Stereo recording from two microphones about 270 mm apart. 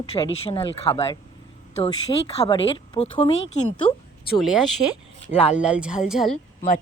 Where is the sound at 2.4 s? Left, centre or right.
Centre.